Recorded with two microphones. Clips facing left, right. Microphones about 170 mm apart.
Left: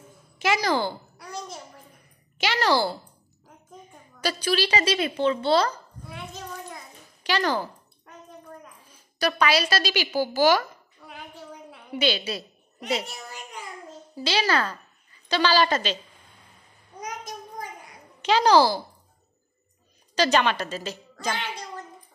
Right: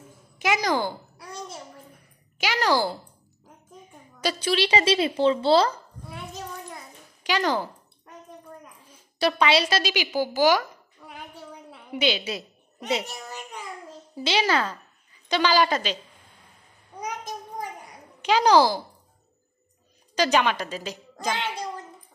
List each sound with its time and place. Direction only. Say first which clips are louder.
0.4 s a woman's voice: even; 15° right (ahead or behind)
1.2 s a sound: left 1 dB; 30° right (ahead or behind)
2.3 s a woman's voice: even; 10° right (ahead or behind)
4.2 s speech: right 1 dB; 25° right (ahead or behind)
7.2 s a woman's voice: even; 15° right (ahead or behind)
9.2 s speech: right 1 dB; 25° right (ahead or behind)
11.0 s a sound: even; 10° right (ahead or behind)
11.9 s a woman's voice: even; 20° right (ahead or behind)
14.1 s a woman's voice: right 1 dB; 20° right (ahead or behind)
18.2 s a woman's voice: even; 15° right (ahead or behind)
20.2 s a woman's voice: even; 10° right (ahead or behind)